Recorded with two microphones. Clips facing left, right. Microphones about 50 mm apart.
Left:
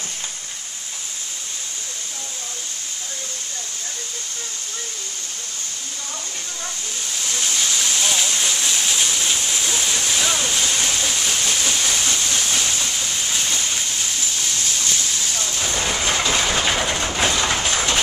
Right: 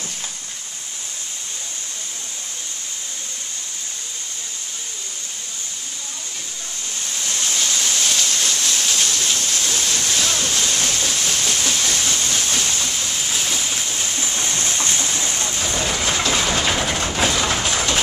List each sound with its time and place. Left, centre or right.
7.3 s a sound: centre
14.3 s train: right
15.6 s train: centre